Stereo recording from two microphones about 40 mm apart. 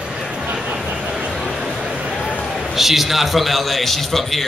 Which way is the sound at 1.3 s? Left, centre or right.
Centre.